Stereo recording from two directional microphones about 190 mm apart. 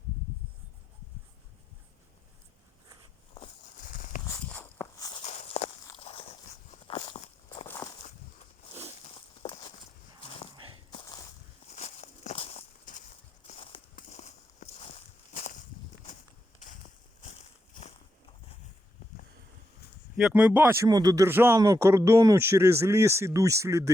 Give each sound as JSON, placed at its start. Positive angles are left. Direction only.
{"t": 3.8, "sound": "a sound", "side_deg": 45}
{"t": 4.4, "sound": "walk", "side_deg": 10}
{"t": 4.9, "sound": "walk", "side_deg": 20}
{"t": 5.2, "sound": "walk", "side_deg": 35}
{"t": 9.4, "sound": "walk", "side_deg": 25}
{"t": 11.7, "sound": "walk", "side_deg": 35}
{"t": 17.7, "sound": "walk", "side_deg": 45}
{"t": 20.1, "sound": "speech", "side_deg": -5}